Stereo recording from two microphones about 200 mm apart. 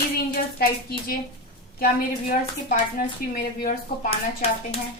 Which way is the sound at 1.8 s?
45° left (ahead or behind).